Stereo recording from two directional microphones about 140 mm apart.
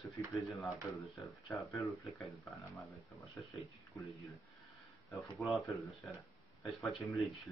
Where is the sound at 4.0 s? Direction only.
25° left (ahead or behind).